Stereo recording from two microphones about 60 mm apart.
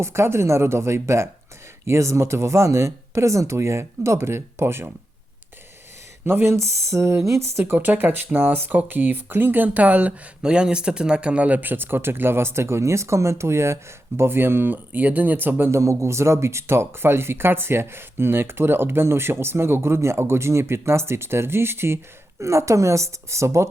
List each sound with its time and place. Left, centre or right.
0.0 s speech: right
6.2 s speech: right
9.6 s speech: right
15.7 s speech: right
22.4 s speech: right